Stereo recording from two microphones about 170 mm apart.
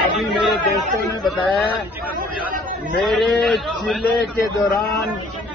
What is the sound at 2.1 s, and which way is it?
Speech, 55° right (ahead or behind).